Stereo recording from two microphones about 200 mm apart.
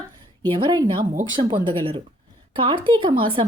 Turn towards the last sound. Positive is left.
turn(degrees=-25)  # may be behind; listen again after turning